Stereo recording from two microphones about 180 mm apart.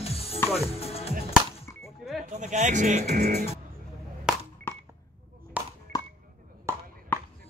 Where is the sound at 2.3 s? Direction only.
40° right (ahead or behind).